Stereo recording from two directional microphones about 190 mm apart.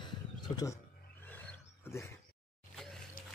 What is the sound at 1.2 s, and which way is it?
Wild animals, 10° left (ahead or behind).